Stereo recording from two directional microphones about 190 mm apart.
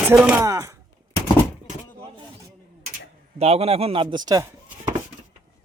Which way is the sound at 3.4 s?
35° right (ahead or behind).